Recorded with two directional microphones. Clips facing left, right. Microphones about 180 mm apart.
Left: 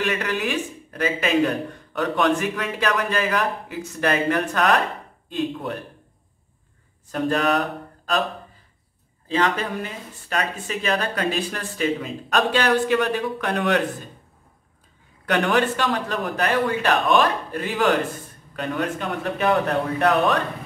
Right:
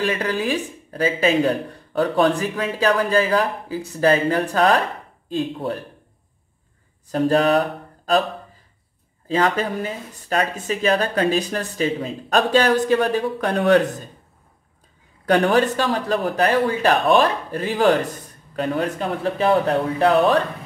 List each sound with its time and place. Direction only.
0.0 s speech: 35° right (ahead or behind)
7.1 s a sound: 35° right (ahead or behind)
9.3 s speech: 35° right (ahead or behind)
15.2 s speech: 35° right (ahead or behind)